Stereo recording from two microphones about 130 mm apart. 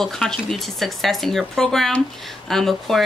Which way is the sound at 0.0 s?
5° left (ahead or behind).